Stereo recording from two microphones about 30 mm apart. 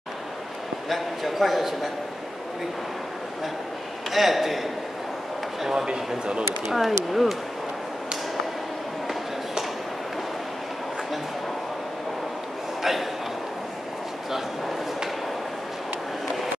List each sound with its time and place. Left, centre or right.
0.8 s a man's voice: centre
4.1 s a man's voice: centre
5.9 s speech: right
6.7 s a man's voice: centre